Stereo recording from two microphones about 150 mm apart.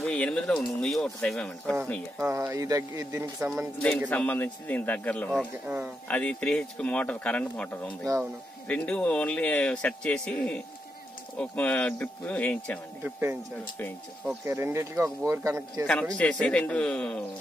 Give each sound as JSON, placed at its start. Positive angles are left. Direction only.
{"t": 0.0, "sound": "speech", "side_deg": 5}
{"t": 2.1, "sound": "speech", "side_deg": -20}
{"t": 4.1, "sound": "speech", "side_deg": 10}
{"t": 13.0, "sound": "speech", "side_deg": -15}
{"t": 14.4, "sound": "speech", "side_deg": -15}
{"t": 16.2, "sound": "speech", "side_deg": 5}